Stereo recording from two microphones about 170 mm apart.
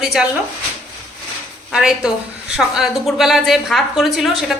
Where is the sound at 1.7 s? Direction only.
5° right (ahead or behind).